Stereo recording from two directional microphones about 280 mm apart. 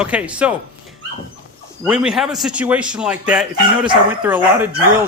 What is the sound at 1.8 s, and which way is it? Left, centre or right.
Speech, centre.